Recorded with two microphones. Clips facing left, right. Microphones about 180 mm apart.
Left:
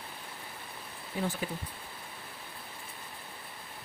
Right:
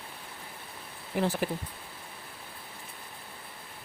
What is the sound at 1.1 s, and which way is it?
Speech, 85° right.